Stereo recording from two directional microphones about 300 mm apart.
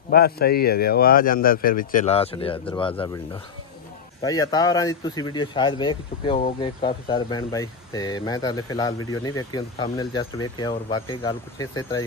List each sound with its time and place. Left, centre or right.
0.1 s speech: left
4.2 s speech: centre